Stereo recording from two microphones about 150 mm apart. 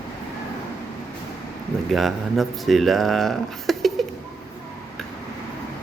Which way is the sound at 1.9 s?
Centre (ahead or behind).